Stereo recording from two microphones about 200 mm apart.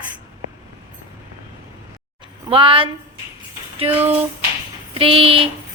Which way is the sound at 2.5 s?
25° right (ahead or behind).